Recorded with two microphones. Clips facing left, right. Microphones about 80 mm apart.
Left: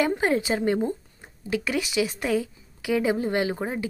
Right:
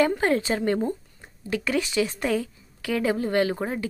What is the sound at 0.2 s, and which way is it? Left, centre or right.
A woman's voice, centre.